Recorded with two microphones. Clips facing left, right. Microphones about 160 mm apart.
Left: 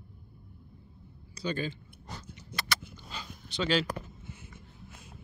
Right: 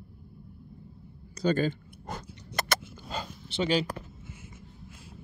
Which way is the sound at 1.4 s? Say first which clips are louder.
Right 7 dB; 45° right (ahead or behind).